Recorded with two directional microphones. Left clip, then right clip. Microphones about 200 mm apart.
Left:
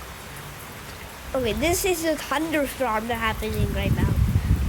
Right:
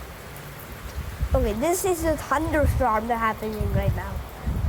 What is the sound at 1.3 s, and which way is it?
Speech, 15° left (ahead or behind).